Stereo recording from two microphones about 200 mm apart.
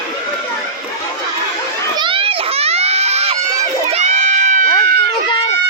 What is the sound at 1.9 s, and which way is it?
Children playing, 25° right (ahead or behind).